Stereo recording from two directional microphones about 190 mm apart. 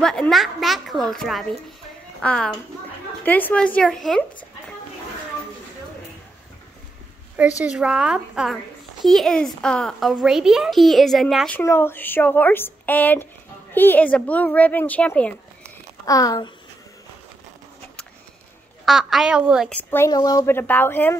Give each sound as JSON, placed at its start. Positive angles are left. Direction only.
{"t": 0.0, "sound": "a child's voice", "side_deg": 5}
{"t": 7.6, "sound": "a child's voice", "side_deg": -5}
{"t": 16.1, "sound": "a child's voice", "side_deg": 20}
{"t": 18.9, "sound": "a child's voice", "side_deg": 0}
{"t": 19.7, "sound": "speech", "side_deg": 10}